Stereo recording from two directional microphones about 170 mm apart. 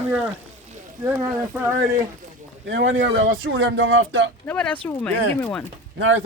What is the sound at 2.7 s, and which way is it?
Speech, 90° right.